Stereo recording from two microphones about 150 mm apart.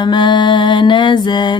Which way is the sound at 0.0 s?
30° left (ahead or behind).